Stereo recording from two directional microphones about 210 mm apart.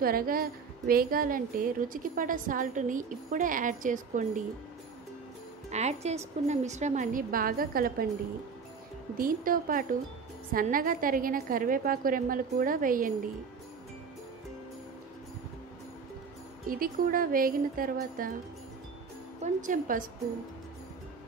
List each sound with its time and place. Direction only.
0.0 s a woman's voice: 45° right (ahead or behind)
5.7 s a woman's voice: 30° right (ahead or behind)
9.2 s a woman's voice: 40° right (ahead or behind)
16.6 s speech: 45° right (ahead or behind)
19.4 s a woman's voice: 40° right (ahead or behind)